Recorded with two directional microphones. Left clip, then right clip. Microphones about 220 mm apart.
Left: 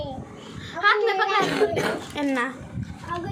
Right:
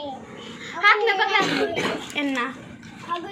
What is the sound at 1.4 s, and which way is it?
Speech, 20° left (ahead or behind).